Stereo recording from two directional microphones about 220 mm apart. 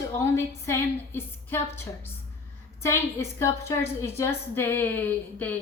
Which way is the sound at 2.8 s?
10° left (ahead or behind).